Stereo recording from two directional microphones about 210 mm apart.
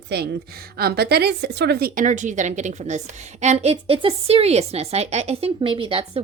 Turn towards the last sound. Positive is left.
turn(degrees=-25)  # may be behind; listen again after turning